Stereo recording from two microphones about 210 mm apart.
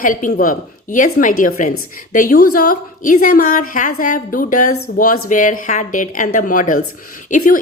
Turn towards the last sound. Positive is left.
turn(degrees=35)  # may be behind; listen again after turning